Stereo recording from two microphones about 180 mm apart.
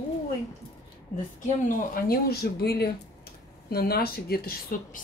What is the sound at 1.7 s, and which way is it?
A woman's voice, 55° left (ahead or behind).